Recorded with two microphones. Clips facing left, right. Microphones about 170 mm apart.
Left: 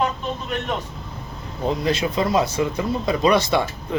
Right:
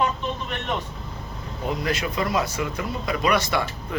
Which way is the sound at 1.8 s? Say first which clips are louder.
Left 4 dB; 25° left (ahead or behind).